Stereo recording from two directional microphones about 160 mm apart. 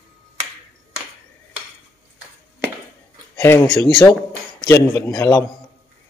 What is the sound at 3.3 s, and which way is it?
A man's voice, 20° left (ahead or behind).